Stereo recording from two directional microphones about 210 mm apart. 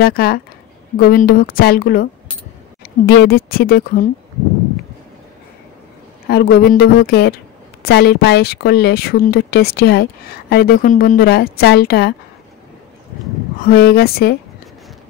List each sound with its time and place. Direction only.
0.0 s speech: 45° left (ahead or behind)
6.2 s speech: 50° left (ahead or behind)
13.7 s speech: 45° left (ahead or behind)